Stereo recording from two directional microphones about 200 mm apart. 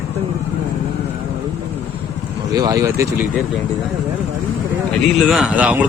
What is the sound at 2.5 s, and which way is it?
Speech, 20° right (ahead or behind).